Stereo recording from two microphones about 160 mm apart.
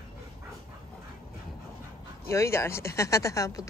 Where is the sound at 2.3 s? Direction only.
15° left (ahead or behind).